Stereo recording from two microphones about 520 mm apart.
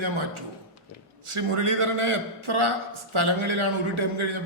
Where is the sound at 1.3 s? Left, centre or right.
Right.